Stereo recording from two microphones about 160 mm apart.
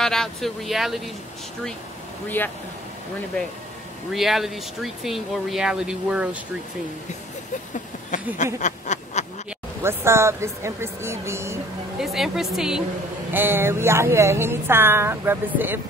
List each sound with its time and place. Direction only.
0.0 s speech: 5° left (ahead or behind)
2.2 s speech: 10° left (ahead or behind)
4.1 s speech: centre (ahead or behind)
8.1 s a sound: 50° left (ahead or behind)
9.8 s speech: 15° right (ahead or behind)
12.0 s speech: centre (ahead or behind)
13.3 s speech: 15° right (ahead or behind)